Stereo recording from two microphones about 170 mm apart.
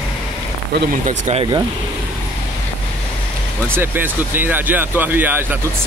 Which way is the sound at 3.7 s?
10° right (ahead or behind).